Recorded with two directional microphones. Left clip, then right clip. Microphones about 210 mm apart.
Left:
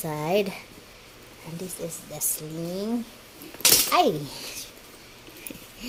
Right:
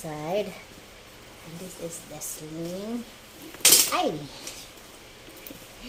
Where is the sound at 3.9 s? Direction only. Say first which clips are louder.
Left 5 dB; 50° left (ahead or behind).